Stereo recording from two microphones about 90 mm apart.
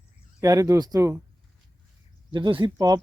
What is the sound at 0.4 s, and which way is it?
Speech, 35° right (ahead or behind).